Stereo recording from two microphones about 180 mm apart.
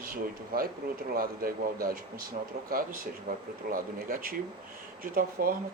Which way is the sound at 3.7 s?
50° right (ahead or behind).